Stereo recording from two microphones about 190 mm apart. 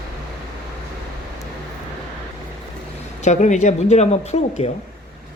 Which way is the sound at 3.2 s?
40° left (ahead or behind).